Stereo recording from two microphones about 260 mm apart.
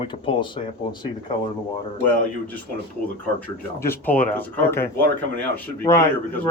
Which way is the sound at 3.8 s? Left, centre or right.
Centre.